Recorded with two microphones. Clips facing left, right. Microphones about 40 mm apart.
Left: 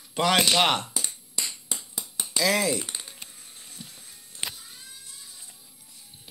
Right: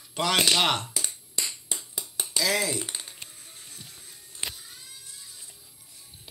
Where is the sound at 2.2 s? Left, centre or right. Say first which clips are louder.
Left 3 dB; left.